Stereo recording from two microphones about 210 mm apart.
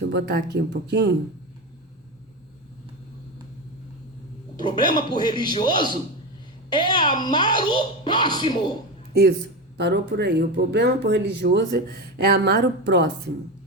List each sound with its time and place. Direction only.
0.0 s speech: 50° right (ahead or behind)
4.5 s speech: 20° left (ahead or behind)
9.7 s speech: 50° right (ahead or behind)